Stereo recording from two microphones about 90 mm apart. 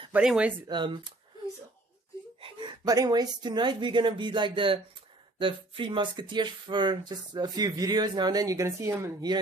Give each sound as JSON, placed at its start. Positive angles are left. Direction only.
{"t": 0.1, "sound": "speech", "side_deg": -10}
{"t": 0.7, "sound": "speech", "side_deg": -65}
{"t": 2.8, "sound": "speech", "side_deg": -45}
{"t": 9.2, "sound": "speech", "side_deg": -50}